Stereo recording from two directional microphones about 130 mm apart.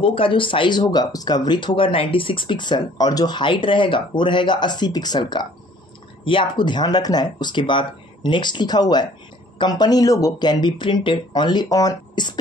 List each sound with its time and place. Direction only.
0.0 s speech: 45° left (ahead or behind)